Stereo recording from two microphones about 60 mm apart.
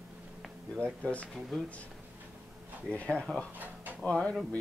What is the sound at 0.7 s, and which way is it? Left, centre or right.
Speech, centre.